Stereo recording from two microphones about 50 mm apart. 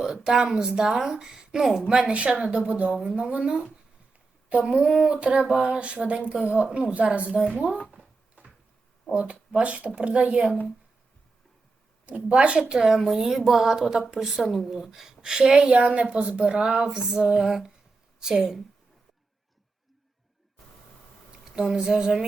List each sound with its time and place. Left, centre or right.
0.0 s speech: centre
9.1 s speech: right
12.0 s a woman's voice: right
21.4 s speech: centre